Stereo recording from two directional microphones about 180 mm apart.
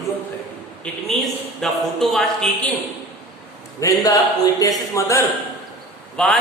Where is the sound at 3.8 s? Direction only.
20° left (ahead or behind).